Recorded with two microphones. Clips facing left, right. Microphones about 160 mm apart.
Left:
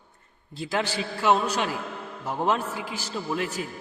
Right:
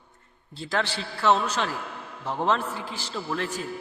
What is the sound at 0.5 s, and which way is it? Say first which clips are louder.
A man's voice: left 1 dB; 15° left (ahead or behind).